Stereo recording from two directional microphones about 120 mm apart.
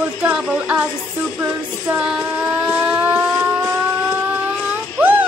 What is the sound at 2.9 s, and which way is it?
Siren, 15° right (ahead or behind).